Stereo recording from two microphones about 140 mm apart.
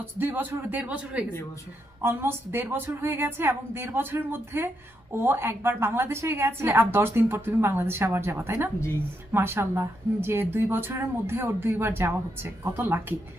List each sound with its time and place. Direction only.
0.0 s a woman's voice: 15° right (ahead or behind)